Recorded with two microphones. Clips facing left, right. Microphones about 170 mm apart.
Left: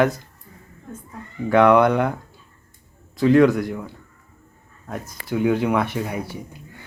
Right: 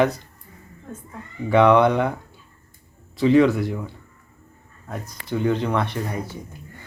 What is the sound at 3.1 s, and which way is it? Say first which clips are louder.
Speech: left 1 dB; centre (ahead or behind).